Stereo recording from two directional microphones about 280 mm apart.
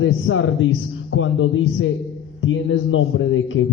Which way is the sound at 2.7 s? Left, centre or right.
Left.